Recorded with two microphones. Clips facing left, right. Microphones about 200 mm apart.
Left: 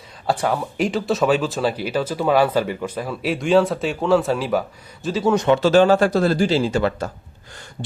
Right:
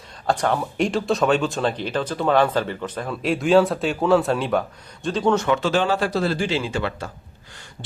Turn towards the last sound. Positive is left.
turn(degrees=40)  # may be behind; listen again after turning